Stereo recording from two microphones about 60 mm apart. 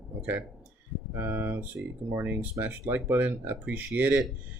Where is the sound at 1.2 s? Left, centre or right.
Right.